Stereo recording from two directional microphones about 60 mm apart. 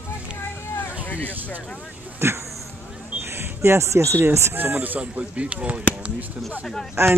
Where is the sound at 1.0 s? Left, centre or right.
Left.